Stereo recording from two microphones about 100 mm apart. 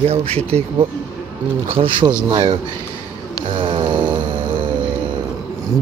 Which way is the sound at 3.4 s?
55° right (ahead or behind).